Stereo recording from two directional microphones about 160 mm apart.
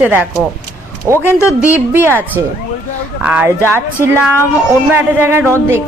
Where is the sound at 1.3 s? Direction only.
15° left (ahead or behind).